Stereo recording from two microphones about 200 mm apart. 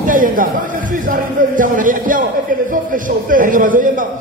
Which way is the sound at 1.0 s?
40° right (ahead or behind).